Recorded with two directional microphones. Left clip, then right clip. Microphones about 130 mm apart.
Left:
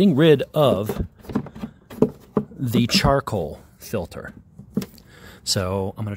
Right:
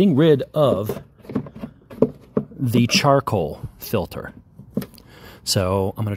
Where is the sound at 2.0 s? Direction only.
80° left.